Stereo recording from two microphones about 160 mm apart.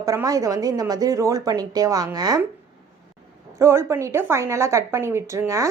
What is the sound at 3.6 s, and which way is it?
A woman's voice, 15° right (ahead or behind).